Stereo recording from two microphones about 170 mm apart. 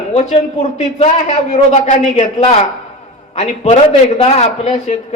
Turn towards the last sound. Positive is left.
turn(degrees=40)  # may be behind; listen again after turning